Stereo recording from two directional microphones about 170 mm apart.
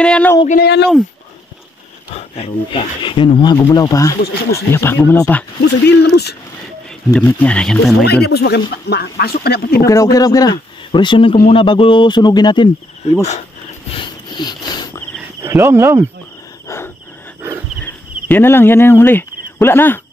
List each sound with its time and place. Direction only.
0.0 s speech: 5° left (ahead or behind)
0.6 s speech: 80° left
2.1 s speech: 35° left (ahead or behind)
3.5 s speech: 20° left (ahead or behind)
5.6 s speech: 80° left
7.1 s speech: 5° left (ahead or behind)
8.0 s speech: 70° left (ahead or behind)
9.8 s speech: 20° left (ahead or behind)
13.9 s a sound: 25° left (ahead or behind)
15.4 s speech: 15° right (ahead or behind)
16.6 s wild animals: 15° left (ahead or behind)
17.8 s speech: 15° left (ahead or behind)